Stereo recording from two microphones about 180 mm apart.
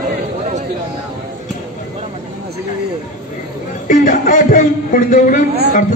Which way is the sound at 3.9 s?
45° left (ahead or behind).